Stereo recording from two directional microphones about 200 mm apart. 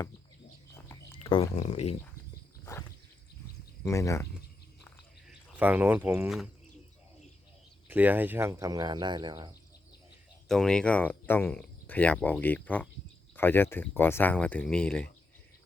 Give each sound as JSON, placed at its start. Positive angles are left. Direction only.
{"t": 0.7, "sound": "a sound", "side_deg": 20}
{"t": 1.5, "sound": "speech", "side_deg": 35}
{"t": 3.8, "sound": "speech", "side_deg": 15}
{"t": 5.3, "sound": "speech", "side_deg": -5}
{"t": 7.9, "sound": "speech", "side_deg": -10}
{"t": 10.5, "sound": "speech", "side_deg": 5}